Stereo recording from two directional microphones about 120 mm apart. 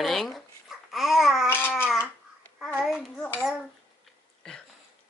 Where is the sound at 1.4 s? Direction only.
15° left (ahead or behind).